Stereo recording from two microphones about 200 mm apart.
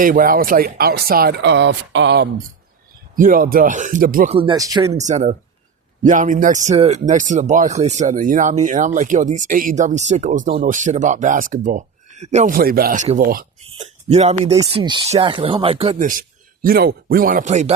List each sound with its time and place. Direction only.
0.0 s speech: 45° right (ahead or behind); by 2.3 s 60° right (ahead or behind)
3.2 s speech: 45° right (ahead or behind)
4.3 s speech: 25° right (ahead or behind)
4.9 s speech: 35° right (ahead or behind)
13.7 s speech: 30° right (ahead or behind)